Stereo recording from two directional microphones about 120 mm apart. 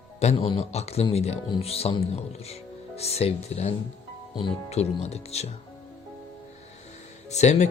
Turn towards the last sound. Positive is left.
turn(degrees=70)  # may be behind; listen again after turning